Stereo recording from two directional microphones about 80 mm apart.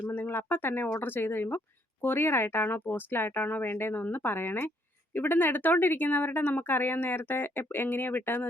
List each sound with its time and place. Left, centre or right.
0.1 s speech: left